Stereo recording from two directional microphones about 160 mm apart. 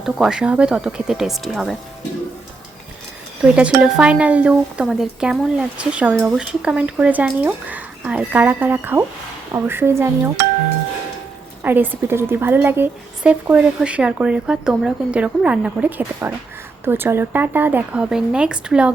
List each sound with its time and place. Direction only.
0.0 s speech: 5° right (ahead or behind)
3.5 s speech: 5° right (ahead or behind)
11.6 s speech: 10° right (ahead or behind)